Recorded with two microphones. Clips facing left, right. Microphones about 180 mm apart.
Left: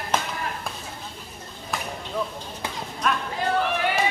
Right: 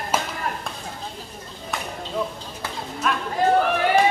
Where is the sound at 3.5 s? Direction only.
45° right (ahead or behind).